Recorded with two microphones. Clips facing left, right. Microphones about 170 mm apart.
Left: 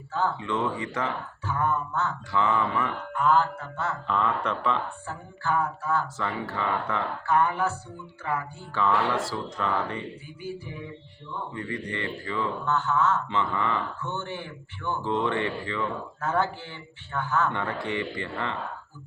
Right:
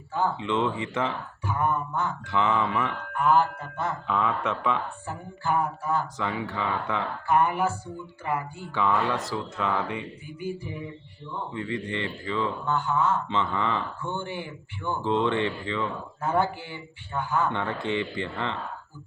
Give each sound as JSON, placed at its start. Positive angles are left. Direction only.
{"t": 0.1, "sound": "speech", "side_deg": -15}
{"t": 1.5, "sound": "mantra", "side_deg": -15}
{"t": 11.5, "sound": "speech", "side_deg": -20}
{"t": 15.6, "sound": "mantra", "side_deg": -20}
{"t": 17.8, "sound": "speech", "side_deg": -20}